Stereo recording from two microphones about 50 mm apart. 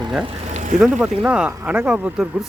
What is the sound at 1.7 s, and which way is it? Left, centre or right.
Speech, centre.